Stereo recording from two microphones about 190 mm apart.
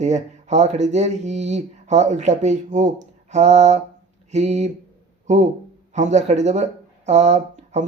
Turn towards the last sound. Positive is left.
turn(degrees=-35)  # may be behind; listen again after turning